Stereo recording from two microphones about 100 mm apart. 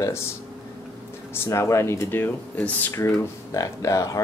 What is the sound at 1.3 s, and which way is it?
Speech, 25° left (ahead or behind).